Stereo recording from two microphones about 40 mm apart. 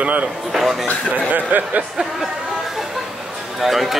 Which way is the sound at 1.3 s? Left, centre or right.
Right.